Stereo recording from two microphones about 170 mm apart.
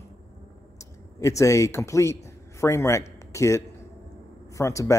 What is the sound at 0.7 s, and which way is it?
A man's voice, 20° left (ahead or behind).